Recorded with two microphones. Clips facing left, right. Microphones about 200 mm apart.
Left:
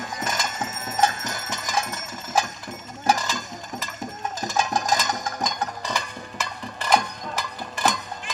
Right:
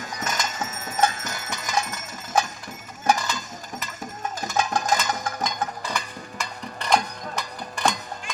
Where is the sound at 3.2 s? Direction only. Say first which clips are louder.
Left 1 dB; 45° left (ahead or behind).